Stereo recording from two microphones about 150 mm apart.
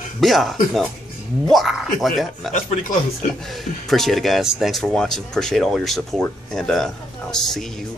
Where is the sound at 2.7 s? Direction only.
55° left (ahead or behind).